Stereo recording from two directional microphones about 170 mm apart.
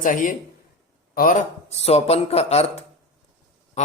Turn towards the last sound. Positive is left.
turn(degrees=40)  # may be behind; listen again after turning